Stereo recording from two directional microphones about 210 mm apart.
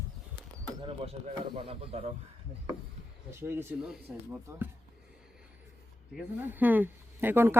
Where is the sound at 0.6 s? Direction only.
25° right (ahead or behind).